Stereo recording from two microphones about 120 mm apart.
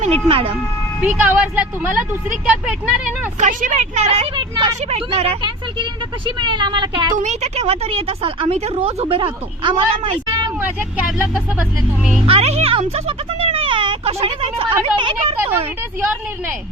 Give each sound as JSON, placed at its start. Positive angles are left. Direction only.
{"t": 0.0, "sound": "speech", "side_deg": -55}
{"t": 1.2, "sound": "speech", "side_deg": -15}
{"t": 3.4, "sound": "a woman's voice", "side_deg": -80}
{"t": 4.4, "sound": "speech", "side_deg": -40}
{"t": 4.9, "sound": "speech", "side_deg": -55}
{"t": 7.2, "sound": "speech", "side_deg": -70}
{"t": 12.2, "sound": "speech", "side_deg": -55}
{"t": 13.1, "sound": "a sound", "side_deg": -50}
{"t": 14.9, "sound": "speech", "side_deg": -45}